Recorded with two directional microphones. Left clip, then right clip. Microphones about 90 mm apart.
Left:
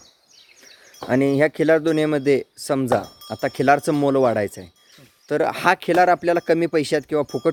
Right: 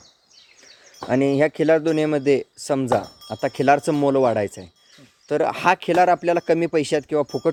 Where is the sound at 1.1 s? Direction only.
35° left (ahead or behind).